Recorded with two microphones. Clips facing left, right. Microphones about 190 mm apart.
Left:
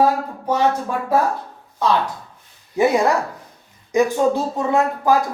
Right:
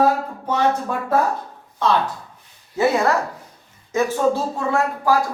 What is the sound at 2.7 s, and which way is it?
Speech, 15° left (ahead or behind).